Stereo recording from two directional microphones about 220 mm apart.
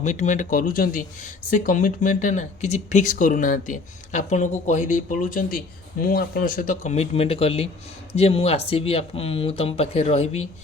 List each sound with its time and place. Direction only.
0.0 s speech: 35° left (ahead or behind)